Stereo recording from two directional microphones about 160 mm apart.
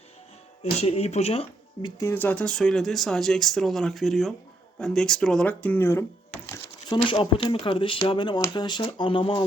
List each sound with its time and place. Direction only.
0.6 s speech: 40° left (ahead or behind)
2.0 s speech: 15° left (ahead or behind); by 9.5 s 30° left (ahead or behind)